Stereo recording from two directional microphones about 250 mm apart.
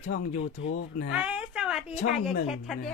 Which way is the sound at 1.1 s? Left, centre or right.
Centre.